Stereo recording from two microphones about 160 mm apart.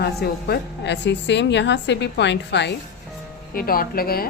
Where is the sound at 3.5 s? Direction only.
65° left (ahead or behind).